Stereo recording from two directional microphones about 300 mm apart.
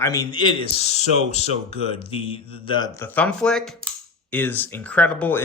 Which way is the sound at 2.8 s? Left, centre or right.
Centre.